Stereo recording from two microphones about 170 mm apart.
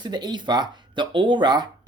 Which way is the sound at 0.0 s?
25° right (ahead or behind).